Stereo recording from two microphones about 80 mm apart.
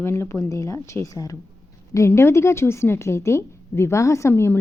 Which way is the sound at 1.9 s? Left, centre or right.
Left.